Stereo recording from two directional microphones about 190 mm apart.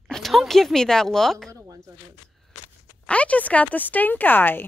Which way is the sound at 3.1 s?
5° left (ahead or behind).